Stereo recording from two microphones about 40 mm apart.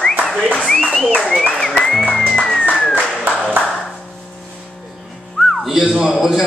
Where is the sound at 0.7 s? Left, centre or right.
Centre.